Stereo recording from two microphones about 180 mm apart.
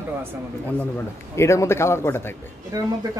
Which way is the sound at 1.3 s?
15° left (ahead or behind).